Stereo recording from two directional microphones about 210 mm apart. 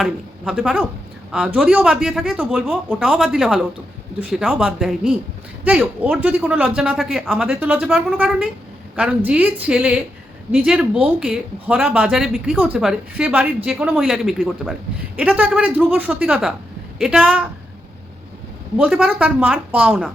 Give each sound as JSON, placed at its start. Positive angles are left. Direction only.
{"t": 0.0, "sound": "a woman's voice", "side_deg": 0}
{"t": 18.8, "sound": "speech", "side_deg": -5}